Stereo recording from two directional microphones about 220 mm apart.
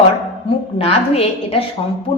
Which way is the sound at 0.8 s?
25° left (ahead or behind).